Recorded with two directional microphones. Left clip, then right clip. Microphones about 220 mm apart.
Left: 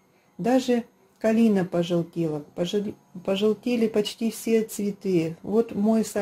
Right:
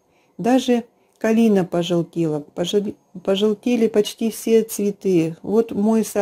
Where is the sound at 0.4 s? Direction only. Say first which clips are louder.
Right 4 dB; 40° right (ahead or behind).